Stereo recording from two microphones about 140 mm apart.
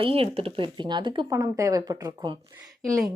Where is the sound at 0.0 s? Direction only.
45° right (ahead or behind).